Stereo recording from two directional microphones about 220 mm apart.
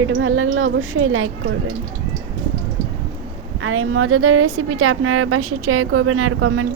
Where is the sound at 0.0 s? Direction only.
65° right (ahead or behind).